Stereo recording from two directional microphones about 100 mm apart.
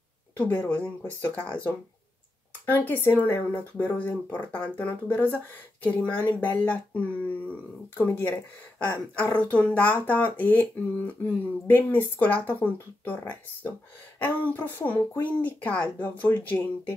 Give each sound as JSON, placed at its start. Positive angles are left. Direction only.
{"t": 0.4, "sound": "speech", "side_deg": 15}